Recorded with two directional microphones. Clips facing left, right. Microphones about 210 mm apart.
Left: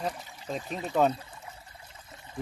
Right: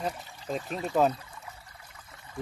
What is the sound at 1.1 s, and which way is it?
Pour, 25° left (ahead or behind).